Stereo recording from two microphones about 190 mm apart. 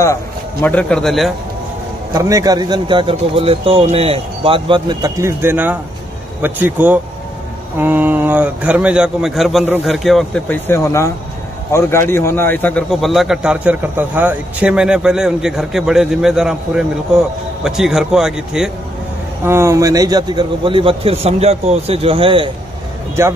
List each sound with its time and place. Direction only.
0.0 s a man's voice: 15° left (ahead or behind)
2.1 s a man's voice: 20° right (ahead or behind)